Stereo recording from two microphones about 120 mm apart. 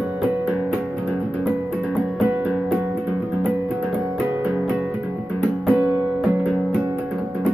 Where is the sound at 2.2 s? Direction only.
15° right (ahead or behind).